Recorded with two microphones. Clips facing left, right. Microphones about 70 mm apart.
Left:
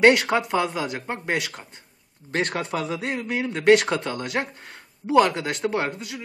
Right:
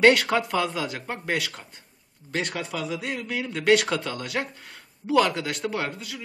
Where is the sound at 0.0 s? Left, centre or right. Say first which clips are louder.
Left 1 dB; centre.